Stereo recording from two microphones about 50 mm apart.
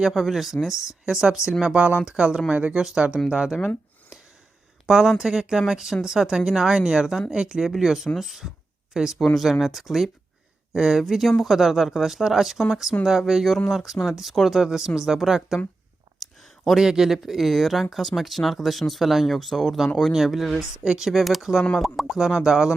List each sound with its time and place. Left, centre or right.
0.1 s speech: centre
1.6 s speech: right
2.7 s speech: centre
4.9 s speech: centre
9.2 s speech: centre
16.2 s a sound: centre
16.8 s speech: centre
21.1 s speech: centre